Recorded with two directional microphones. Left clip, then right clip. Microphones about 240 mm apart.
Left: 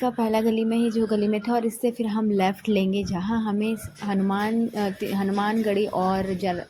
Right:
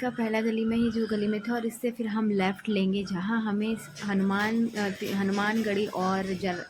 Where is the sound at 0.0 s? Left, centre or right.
Centre.